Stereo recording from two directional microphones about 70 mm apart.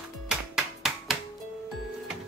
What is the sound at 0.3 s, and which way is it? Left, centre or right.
Music, centre.